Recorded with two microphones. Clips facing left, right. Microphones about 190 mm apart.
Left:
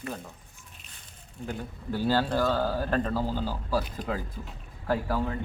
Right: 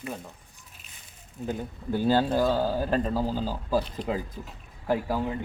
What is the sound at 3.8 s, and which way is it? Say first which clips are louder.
Speech: right 2 dB; 30° right (ahead or behind).